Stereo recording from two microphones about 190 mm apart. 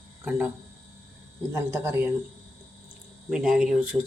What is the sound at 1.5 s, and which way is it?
Speech, 15° right (ahead or behind).